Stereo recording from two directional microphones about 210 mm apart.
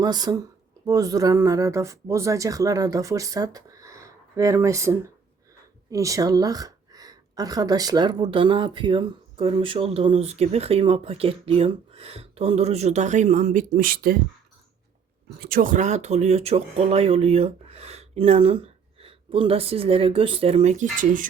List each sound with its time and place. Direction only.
0.0 s a woman's voice: 20° right (ahead or behind); by 14.2 s 45° right (ahead or behind)
15.4 s a woman's voice: 45° right (ahead or behind)